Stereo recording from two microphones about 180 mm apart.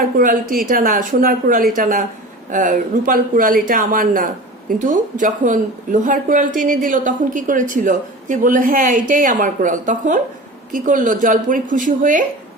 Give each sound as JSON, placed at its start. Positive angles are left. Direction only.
{"t": 0.2, "sound": "speech", "side_deg": -50}